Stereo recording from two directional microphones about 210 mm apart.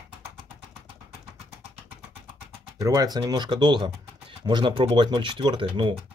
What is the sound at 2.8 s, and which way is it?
Speech, 15° right (ahead or behind).